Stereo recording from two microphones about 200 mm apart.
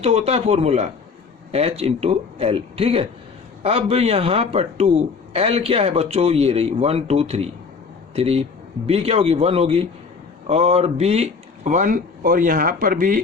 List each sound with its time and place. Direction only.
0.0 s speech: 30° right (ahead or behind)